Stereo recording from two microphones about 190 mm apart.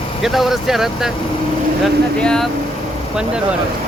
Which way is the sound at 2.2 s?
5° left (ahead or behind).